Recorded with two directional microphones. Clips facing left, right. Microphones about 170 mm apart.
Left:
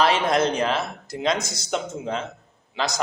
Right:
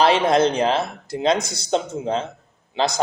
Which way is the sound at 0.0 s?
30° right (ahead or behind).